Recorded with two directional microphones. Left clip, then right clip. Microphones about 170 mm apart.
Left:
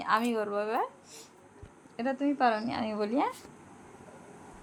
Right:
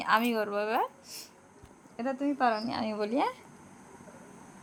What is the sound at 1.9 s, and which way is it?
A woman's voice, 5° right (ahead or behind).